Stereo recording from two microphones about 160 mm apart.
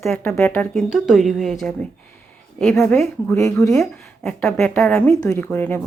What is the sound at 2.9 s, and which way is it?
Speech, 15° left (ahead or behind).